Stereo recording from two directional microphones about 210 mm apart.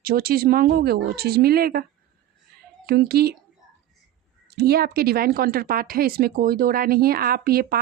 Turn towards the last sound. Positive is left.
turn(degrees=-45)  # may be behind; listen again after turning